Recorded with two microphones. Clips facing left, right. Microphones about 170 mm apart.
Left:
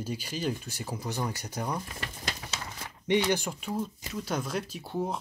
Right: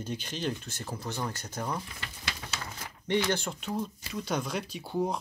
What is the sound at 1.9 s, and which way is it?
Speech, 40° left (ahead or behind).